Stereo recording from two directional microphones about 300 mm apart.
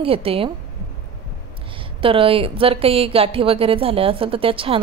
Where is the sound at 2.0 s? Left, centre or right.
Centre.